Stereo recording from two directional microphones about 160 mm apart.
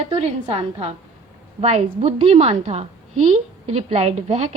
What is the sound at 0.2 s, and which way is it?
A woman's voice, 40° right (ahead or behind).